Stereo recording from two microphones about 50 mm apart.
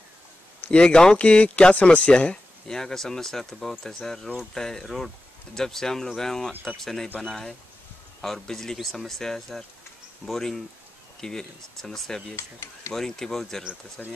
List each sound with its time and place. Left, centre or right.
0.7 s speech: centre
2.7 s speech: centre
11.1 s speech: centre
12.4 s speech: left
12.9 s speech: centre
14.0 s speech: left